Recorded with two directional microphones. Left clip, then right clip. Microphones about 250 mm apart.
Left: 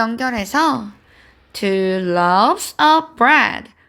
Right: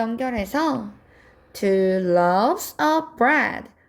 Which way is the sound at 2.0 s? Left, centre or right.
Left.